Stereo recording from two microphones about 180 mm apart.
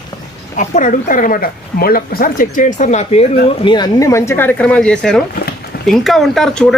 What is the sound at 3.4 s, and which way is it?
Speech, 25° left (ahead or behind).